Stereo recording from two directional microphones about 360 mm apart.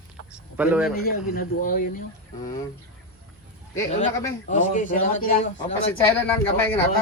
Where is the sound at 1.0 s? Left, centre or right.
Left.